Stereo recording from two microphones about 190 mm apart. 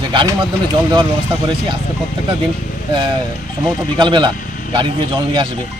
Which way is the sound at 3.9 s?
25° right (ahead or behind).